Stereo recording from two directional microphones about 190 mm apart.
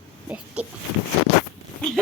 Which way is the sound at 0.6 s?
5° right (ahead or behind).